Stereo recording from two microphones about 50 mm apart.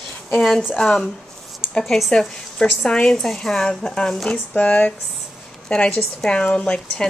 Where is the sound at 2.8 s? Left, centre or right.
Centre.